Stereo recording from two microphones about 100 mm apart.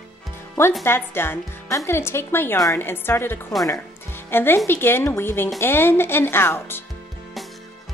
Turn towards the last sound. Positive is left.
turn(degrees=25)  # may be behind; listen again after turning